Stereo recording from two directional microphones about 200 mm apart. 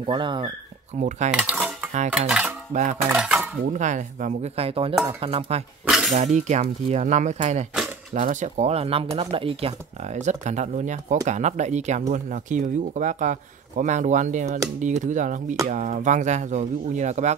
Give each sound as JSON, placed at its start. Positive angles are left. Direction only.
{"t": 0.0, "sound": "speech", "side_deg": -25}
{"t": 0.9, "sound": "speech", "side_deg": -35}
{"t": 1.4, "sound": "cutlery", "side_deg": -5}
{"t": 2.7, "sound": "speech", "side_deg": -35}
{"t": 3.1, "sound": "cutlery", "side_deg": -5}
{"t": 3.6, "sound": "speech", "side_deg": -35}
{"t": 5.9, "sound": "a sound", "side_deg": 0}
{"t": 6.1, "sound": "speech", "side_deg": -35}